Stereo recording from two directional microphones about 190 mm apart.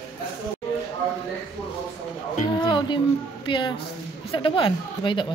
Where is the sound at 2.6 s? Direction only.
25° left (ahead or behind).